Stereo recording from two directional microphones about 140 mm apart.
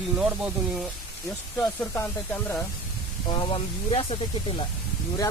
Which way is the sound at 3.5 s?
40° left (ahead or behind).